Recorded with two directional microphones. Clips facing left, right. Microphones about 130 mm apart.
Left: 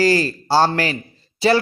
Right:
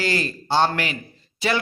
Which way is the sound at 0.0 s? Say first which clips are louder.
Left 8 dB; 35° left (ahead or behind).